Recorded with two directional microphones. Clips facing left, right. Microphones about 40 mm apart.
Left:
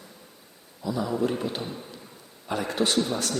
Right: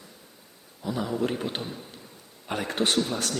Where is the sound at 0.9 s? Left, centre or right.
Right.